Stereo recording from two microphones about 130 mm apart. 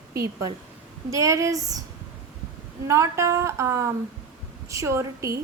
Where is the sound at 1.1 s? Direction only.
25° right (ahead or behind).